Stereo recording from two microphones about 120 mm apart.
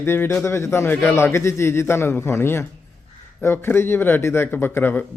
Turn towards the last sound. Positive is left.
turn(degrees=15)  # may be behind; listen again after turning